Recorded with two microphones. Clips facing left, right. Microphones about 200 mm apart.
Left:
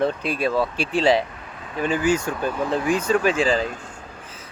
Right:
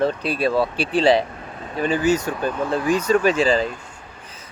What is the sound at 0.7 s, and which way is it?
Speech, 45° left (ahead or behind).